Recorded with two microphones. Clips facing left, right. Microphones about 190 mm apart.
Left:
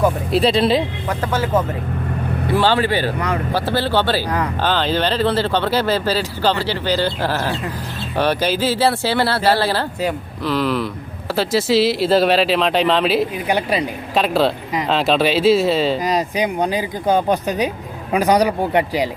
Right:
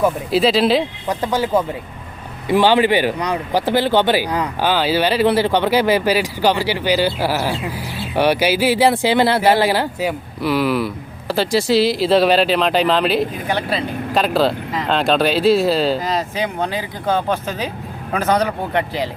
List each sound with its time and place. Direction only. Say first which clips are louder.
0.0 s speech: even; centre (ahead or behind)
1.2 s speech: right 1 dB; 15° right (ahead or behind); by 13.2 s centre (ahead or behind)
13.5 s speech: left 5 dB; 15° left (ahead or behind)
14.1 s speech: even; centre (ahead or behind)
16.0 s speech: left 2 dB; 15° left (ahead or behind)